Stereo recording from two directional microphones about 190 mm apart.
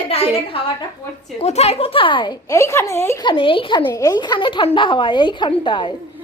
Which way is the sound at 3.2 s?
25° left (ahead or behind).